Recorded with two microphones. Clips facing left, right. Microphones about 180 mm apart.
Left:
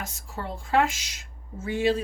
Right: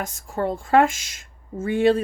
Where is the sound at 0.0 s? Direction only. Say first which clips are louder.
Right 10 dB; 50° right (ahead or behind).